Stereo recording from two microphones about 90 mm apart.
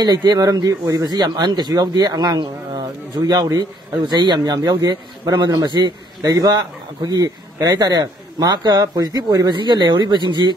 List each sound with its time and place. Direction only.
0.0 s speech: 50° right (ahead or behind)
9.6 s speech: 55° right (ahead or behind)